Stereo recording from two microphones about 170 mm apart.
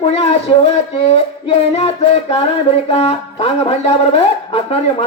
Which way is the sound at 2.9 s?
35° left (ahead or behind).